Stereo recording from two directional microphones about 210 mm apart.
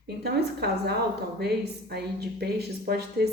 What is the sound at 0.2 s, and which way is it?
A woman's voice, 50° right (ahead or behind).